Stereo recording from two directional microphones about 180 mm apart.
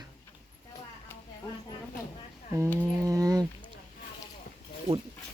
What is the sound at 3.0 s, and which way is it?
Speech, 20° right (ahead or behind).